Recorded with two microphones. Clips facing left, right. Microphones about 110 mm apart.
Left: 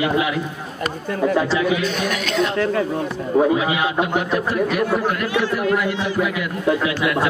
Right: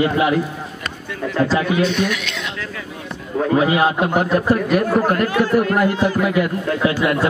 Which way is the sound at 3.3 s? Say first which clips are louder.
Left 5 dB; 20° left (ahead or behind).